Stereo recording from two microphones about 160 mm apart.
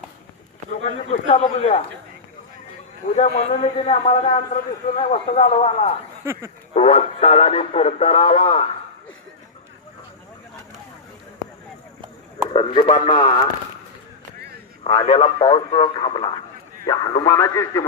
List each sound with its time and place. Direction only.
1.3 s speech: 45° left (ahead or behind)
3.2 s speech: 40° left (ahead or behind)
12.5 s speech: 30° left (ahead or behind)
14.8 s speech: 30° left (ahead or behind)
16.8 s speech: 20° left (ahead or behind)